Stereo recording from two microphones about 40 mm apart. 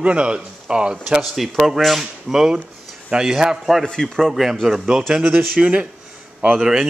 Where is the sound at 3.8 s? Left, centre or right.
Centre.